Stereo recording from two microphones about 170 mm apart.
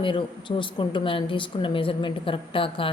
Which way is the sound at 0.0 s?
30° left (ahead or behind).